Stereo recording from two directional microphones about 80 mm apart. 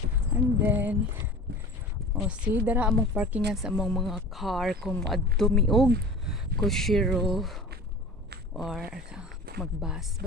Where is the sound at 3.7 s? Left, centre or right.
Centre.